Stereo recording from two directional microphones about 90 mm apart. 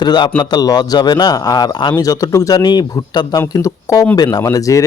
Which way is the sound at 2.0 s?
40° left (ahead or behind).